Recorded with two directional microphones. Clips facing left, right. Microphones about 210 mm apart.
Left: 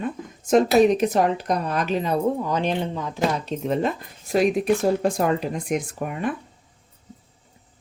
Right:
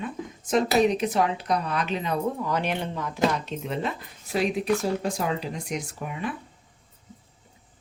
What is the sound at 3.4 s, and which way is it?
Speech, 40° left (ahead or behind).